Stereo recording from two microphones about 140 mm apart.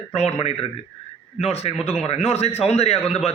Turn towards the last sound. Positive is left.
turn(degrees=50)  # may be behind; listen again after turning